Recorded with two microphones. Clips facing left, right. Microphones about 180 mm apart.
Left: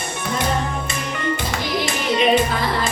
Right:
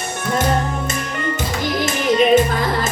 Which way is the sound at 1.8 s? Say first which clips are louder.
Right 4 dB; 45° right (ahead or behind).